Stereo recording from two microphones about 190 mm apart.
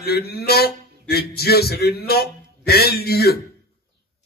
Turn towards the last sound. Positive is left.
turn(degrees=55)  # may be behind; listen again after turning